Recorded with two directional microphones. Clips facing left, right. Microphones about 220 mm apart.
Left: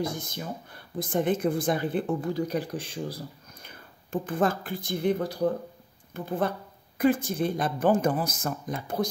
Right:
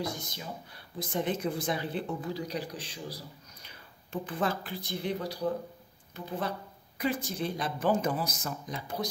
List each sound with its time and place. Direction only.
0.0 s speech: 50° left (ahead or behind)